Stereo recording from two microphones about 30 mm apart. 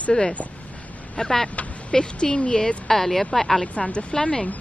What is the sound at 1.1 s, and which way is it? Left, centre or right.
Speech, left.